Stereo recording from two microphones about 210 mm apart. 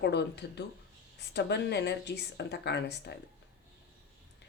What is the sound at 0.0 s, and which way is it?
Speech, 55° left (ahead or behind).